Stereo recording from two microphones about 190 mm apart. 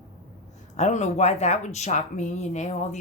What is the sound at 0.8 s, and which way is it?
Speech, 35° left (ahead or behind).